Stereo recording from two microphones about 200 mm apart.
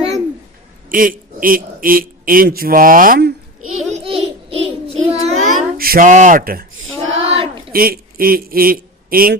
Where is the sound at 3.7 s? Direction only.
35° right (ahead or behind).